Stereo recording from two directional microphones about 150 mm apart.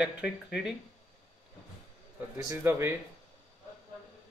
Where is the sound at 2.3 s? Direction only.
20° right (ahead or behind).